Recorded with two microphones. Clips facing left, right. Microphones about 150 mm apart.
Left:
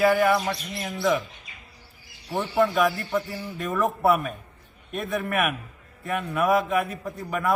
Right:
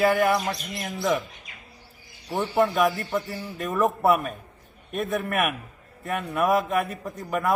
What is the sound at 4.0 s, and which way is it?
Mantra, 45° right (ahead or behind).